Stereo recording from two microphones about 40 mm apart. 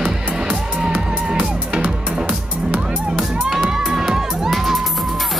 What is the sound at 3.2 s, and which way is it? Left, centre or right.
Music, centre.